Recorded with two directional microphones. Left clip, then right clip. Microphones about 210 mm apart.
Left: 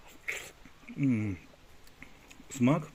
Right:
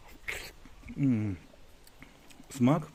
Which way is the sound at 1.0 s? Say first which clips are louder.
Right 1 dB; 5° right (ahead or behind).